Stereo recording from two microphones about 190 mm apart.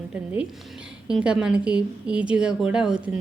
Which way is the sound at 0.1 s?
5° right (ahead or behind).